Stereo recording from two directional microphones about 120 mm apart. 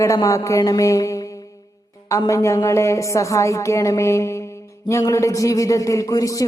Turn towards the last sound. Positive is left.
turn(degrees=30)  # may be behind; listen again after turning